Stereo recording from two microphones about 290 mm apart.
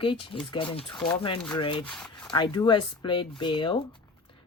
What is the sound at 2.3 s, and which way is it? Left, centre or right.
A woman's voice, centre.